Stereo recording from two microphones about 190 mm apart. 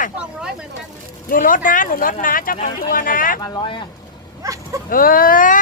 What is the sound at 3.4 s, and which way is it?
Speech, 20° left (ahead or behind).